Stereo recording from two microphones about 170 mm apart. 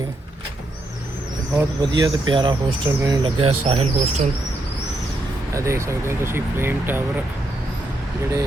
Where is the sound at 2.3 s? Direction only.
30° right (ahead or behind).